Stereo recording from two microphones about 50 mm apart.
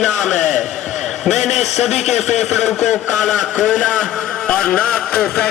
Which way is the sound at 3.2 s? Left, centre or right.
Centre.